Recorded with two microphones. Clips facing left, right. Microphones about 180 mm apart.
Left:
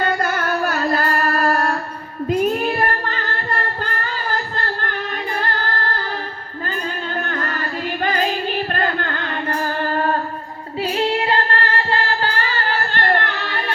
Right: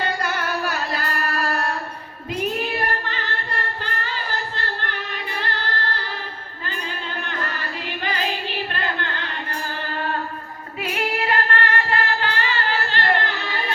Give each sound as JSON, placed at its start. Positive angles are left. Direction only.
{"t": 0.0, "sound": "music", "side_deg": 45}
{"t": 8.7, "sound": "music", "side_deg": 50}
{"t": 10.8, "sound": "music", "side_deg": 30}
{"t": 12.4, "sound": "singing", "side_deg": 40}